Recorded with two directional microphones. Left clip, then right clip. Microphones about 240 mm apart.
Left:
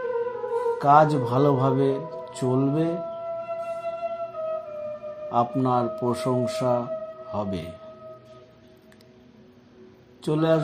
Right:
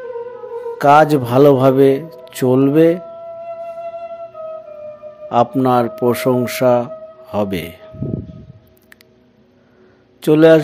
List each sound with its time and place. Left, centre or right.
0.7 s speech: right
5.3 s speech: right
10.2 s speech: right